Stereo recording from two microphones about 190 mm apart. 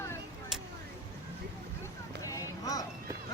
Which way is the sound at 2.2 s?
15° left (ahead or behind).